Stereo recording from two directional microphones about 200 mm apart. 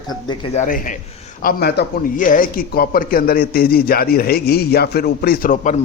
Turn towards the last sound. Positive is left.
turn(degrees=45)  # may be behind; listen again after turning